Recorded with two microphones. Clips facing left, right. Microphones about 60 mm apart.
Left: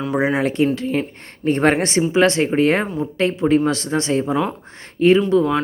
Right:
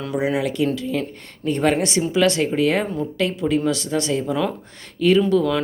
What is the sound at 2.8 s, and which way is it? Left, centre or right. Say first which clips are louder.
Speech: left 1 dB; centre.